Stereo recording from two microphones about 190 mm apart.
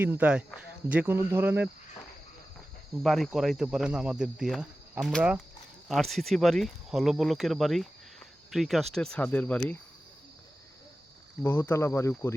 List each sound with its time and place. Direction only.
0.0 s speech: 10° right (ahead or behind)
3.0 s speech: centre (ahead or behind)
11.4 s speech: 10° left (ahead or behind)